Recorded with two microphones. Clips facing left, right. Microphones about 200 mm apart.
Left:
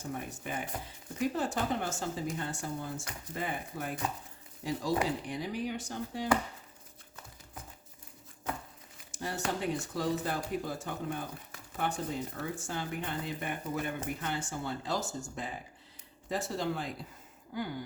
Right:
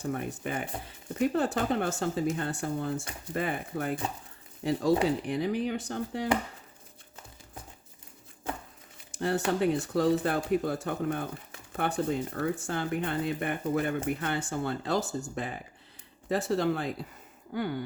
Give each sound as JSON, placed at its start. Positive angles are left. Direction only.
{"t": 0.0, "sound": "speech", "side_deg": -60}
{"t": 9.1, "sound": "speech", "side_deg": -60}